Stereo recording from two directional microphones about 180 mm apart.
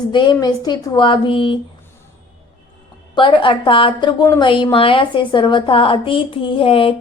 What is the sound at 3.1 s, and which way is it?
Speech, 30° left (ahead or behind).